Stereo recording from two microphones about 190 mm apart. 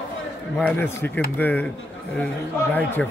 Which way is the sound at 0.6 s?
10° left (ahead or behind).